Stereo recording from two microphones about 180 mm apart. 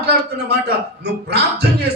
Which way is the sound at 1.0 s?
65° right (ahead or behind).